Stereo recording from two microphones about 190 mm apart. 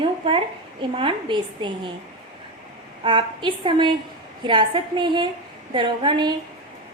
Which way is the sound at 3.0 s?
25° right (ahead or behind).